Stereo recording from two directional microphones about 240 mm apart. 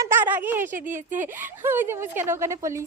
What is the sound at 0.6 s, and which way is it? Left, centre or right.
Speech, right.